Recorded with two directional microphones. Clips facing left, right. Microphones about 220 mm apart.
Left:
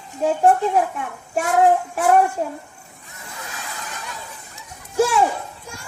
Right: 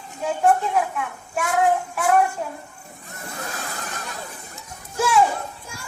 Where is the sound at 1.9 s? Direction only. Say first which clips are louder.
Left 3 dB; 35° left (ahead or behind).